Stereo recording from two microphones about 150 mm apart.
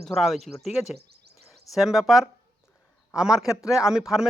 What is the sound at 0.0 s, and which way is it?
Speech, centre (ahead or behind).